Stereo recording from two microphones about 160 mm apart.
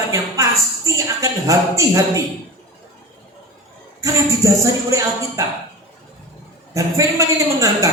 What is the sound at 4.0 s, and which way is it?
Speech, 20° right (ahead or behind).